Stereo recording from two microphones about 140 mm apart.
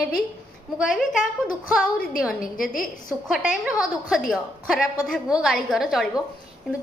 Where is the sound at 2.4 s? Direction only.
75° left (ahead or behind).